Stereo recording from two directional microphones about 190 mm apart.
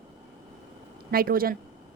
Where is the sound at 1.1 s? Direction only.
50° right (ahead or behind).